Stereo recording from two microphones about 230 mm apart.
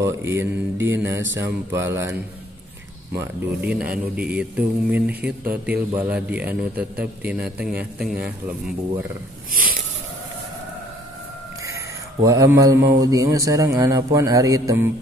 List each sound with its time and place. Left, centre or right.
0.0 s speech: centre
3.2 s speech: centre
9.5 s a sound: right
11.6 s chicken: centre
13.0 s speech: centre